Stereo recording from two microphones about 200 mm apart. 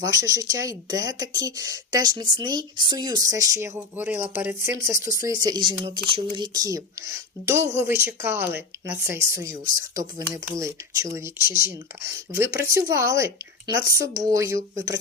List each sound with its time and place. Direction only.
0.0 s speech: 20° right (ahead or behind)